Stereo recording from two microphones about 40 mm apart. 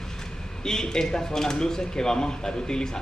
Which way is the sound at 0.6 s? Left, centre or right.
Centre.